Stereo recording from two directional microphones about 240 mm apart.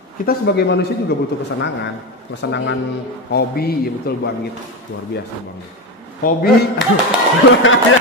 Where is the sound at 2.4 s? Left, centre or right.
Left.